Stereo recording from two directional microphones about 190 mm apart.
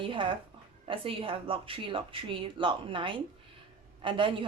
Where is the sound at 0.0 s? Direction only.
25° right (ahead or behind).